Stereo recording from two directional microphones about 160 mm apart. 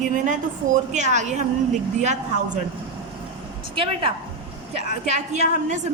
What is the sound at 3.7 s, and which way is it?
Speech, 35° right (ahead or behind).